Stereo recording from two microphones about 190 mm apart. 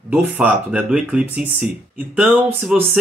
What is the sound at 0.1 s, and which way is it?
A man's voice, 5° right (ahead or behind).